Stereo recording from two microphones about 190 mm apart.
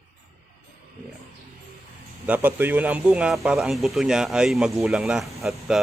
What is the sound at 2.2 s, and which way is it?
Speech, 10° right (ahead or behind).